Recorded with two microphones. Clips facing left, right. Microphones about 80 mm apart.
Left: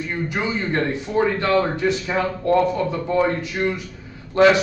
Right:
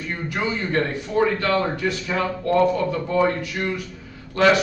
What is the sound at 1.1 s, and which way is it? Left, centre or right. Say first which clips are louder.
A man's voice: left 1 dB; left.